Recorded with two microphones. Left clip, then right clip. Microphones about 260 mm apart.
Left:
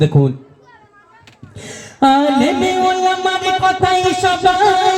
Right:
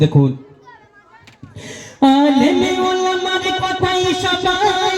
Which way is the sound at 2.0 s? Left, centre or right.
Left.